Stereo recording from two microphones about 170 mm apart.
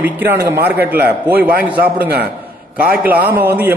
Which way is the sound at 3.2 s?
15° right (ahead or behind).